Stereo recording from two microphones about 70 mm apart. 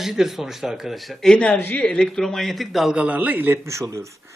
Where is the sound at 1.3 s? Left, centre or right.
Centre.